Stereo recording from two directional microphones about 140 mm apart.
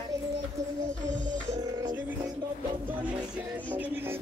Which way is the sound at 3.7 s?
15° right (ahead or behind).